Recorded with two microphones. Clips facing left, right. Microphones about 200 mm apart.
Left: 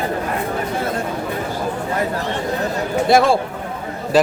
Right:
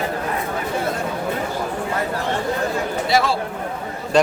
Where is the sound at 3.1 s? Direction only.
50° left (ahead or behind).